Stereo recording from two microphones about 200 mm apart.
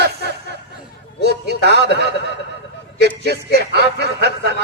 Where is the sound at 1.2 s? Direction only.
55° right (ahead or behind).